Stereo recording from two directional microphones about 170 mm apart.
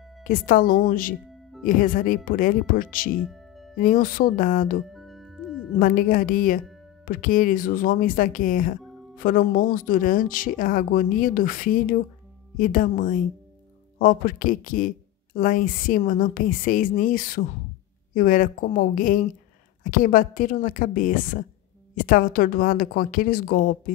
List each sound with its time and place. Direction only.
0.2 s speech: 50° left (ahead or behind)
4.9 s music: centre (ahead or behind)
5.8 s speech: 55° left (ahead or behind)